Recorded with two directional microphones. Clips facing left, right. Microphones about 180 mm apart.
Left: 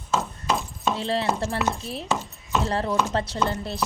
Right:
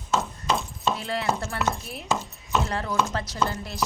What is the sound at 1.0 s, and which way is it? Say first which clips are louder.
Chopping: left 3 dB; 30° left (ahead or behind).